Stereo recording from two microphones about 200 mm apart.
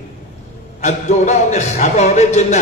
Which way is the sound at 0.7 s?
35° left (ahead or behind).